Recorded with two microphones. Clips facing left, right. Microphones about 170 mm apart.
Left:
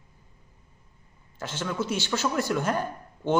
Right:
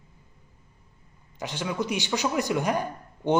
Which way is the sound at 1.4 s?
15° right (ahead or behind).